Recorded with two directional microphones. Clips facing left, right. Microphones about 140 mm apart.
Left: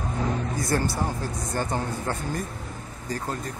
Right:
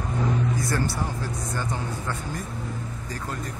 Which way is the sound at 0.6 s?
40° left (ahead or behind).